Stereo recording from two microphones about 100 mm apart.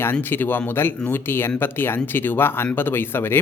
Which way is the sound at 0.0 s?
20° left (ahead or behind).